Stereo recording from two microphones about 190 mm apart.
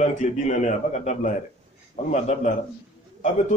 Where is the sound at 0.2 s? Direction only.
40° left (ahead or behind).